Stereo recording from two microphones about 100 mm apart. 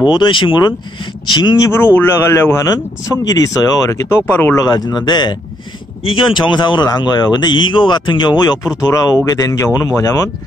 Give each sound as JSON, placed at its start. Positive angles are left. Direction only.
{"t": 0.1, "sound": "speech", "side_deg": 55}
{"t": 2.0, "sound": "speech", "side_deg": 25}
{"t": 4.3, "sound": "speech", "side_deg": 20}
{"t": 4.6, "sound": "speech", "side_deg": 40}
{"t": 6.0, "sound": "speech", "side_deg": 60}